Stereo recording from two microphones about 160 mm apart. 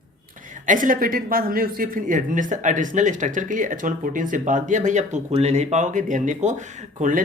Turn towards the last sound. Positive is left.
turn(degrees=-50)  # may be behind; listen again after turning